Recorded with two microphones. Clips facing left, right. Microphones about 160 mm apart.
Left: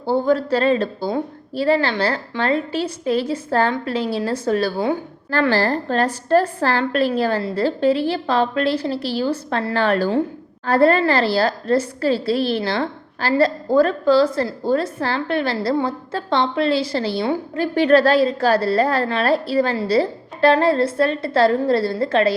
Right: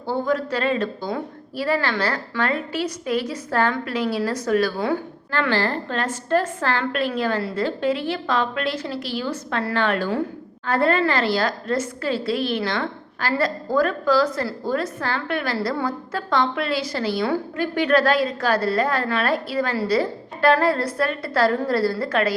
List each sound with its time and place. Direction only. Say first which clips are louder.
0.0 s a woman's voice: left 5 dB; 30° left (ahead or behind)
5.3 s a woman's voice: left 4 dB; 40° left (ahead or behind)